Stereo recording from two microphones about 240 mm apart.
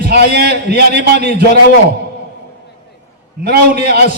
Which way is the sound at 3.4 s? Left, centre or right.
Right.